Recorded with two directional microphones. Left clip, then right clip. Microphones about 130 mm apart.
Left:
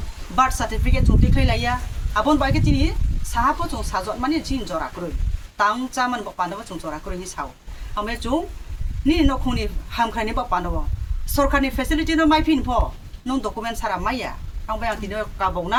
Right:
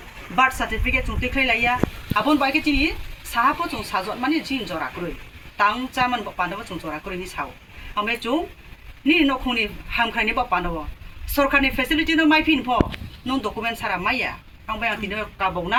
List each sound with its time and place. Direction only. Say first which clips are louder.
0.3 s speech: even; 20° left (ahead or behind); by 7.5 s 5° left (ahead or behind)
7.9 s speech: right 1 dB; 20° left (ahead or behind)